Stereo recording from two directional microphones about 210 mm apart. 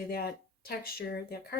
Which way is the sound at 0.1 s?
45° left (ahead or behind).